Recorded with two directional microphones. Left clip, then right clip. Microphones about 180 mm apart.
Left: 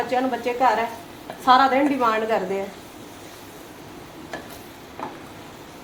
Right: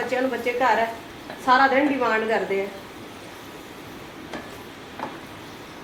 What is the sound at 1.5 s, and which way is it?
Speech, 75° left (ahead or behind).